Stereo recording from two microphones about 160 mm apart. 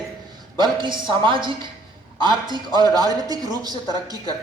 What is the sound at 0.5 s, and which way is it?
Speech, 30° right (ahead or behind).